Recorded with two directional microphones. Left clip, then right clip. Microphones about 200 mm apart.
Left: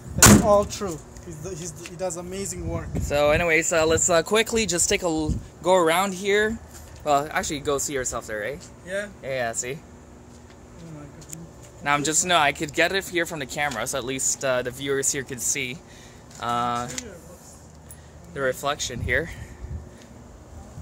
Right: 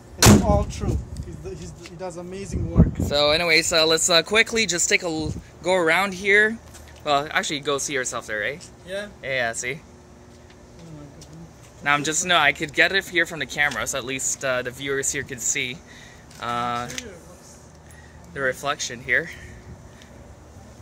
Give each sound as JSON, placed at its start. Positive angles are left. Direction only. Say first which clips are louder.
{"t": 0.5, "sound": "speech", "louder": "left 4 dB", "side_deg": 30}
{"t": 1.5, "sound": "speech", "louder": "left 1 dB", "side_deg": 45}
{"t": 2.0, "sound": "speech", "louder": "left 3 dB", "side_deg": 55}
{"t": 3.1, "sound": "speech", "louder": "even", "side_deg": -15}
{"t": 5.6, "sound": "speech", "louder": "even", "side_deg": 10}
{"t": 11.8, "sound": "speech", "louder": "right 1 dB", "side_deg": 5}
{"t": 18.3, "sound": "speech", "louder": "right 1 dB", "side_deg": 5}